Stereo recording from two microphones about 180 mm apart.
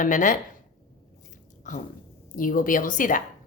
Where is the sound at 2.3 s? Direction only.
50° left (ahead or behind).